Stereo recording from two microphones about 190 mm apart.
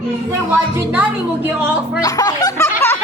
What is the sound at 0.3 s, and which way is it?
Speech, 10° right (ahead or behind).